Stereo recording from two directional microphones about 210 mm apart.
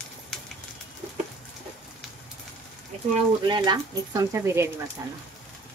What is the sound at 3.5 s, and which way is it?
Speech, 20° right (ahead or behind).